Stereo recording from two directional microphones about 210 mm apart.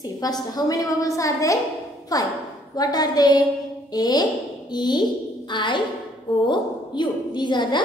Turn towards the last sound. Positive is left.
turn(degrees=20)  # may be behind; listen again after turning